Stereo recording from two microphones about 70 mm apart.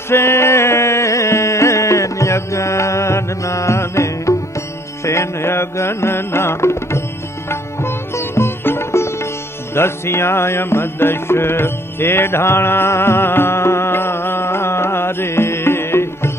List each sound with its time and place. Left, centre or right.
0.1 s music: left
7.4 s sitar: left
9.8 s music: left